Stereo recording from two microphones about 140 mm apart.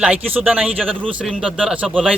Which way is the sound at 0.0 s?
10° right (ahead or behind).